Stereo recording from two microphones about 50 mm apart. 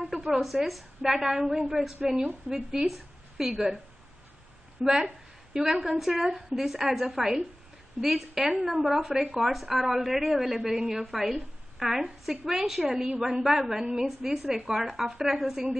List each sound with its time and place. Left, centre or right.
0.0 s a woman's voice: centre
2.1 s a woman's voice: centre
2.9 s a woman's voice: centre
12.8 s a woman's voice: centre
13.5 s a woman's voice: centre